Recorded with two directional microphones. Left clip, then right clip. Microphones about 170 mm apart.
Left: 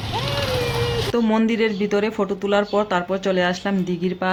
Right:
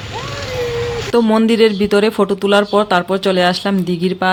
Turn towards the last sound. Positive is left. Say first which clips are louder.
# right 6 dB
turn(degrees=-25)  # may be behind; listen again after turning